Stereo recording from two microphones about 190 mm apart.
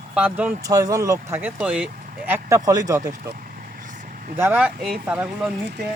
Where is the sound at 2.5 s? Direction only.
20° right (ahead or behind).